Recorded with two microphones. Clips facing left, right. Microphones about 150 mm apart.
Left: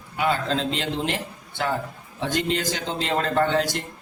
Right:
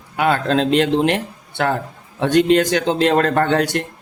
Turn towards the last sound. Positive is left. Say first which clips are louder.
# right 5 dB
turn(degrees=-65)  # may be behind; listen again after turning